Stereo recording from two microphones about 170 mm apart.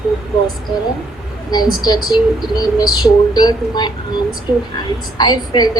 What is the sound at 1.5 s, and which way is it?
Speech, 25° left (ahead or behind).